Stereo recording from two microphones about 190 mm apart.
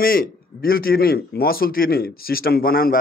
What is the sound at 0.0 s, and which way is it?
Speech, 50° left (ahead or behind).